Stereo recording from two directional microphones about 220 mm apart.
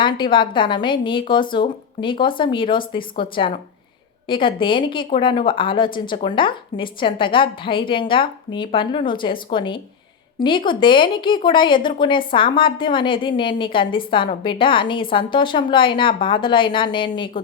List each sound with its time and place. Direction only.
0.0 s a woman's voice: 20° left (ahead or behind)